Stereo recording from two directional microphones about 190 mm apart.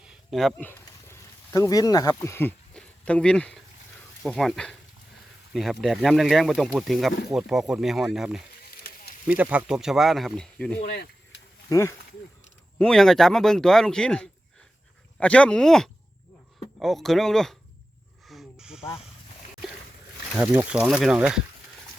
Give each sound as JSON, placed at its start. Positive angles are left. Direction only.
{"t": 0.3, "sound": "speech", "side_deg": 0}
{"t": 10.8, "sound": "speech", "side_deg": 55}
{"t": 11.7, "sound": "speech", "side_deg": 15}
{"t": 12.8, "sound": "speech", "side_deg": 0}
{"t": 18.3, "sound": "snake", "side_deg": 0}
{"t": 20.3, "sound": "speech", "side_deg": -5}